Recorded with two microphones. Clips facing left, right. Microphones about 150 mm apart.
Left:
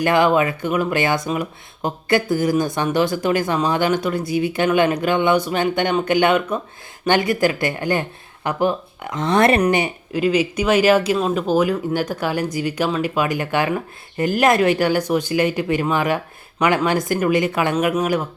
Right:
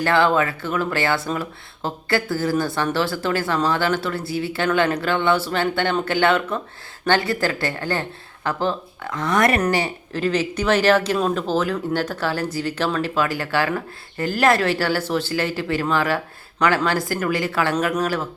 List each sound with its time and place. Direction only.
0.0 s speech: 15° left (ahead or behind)